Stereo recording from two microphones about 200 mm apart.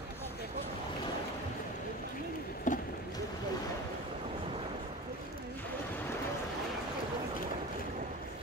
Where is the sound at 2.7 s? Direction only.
40° left (ahead or behind).